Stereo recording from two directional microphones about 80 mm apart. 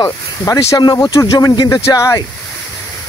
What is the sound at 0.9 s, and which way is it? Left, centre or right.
Speech, left.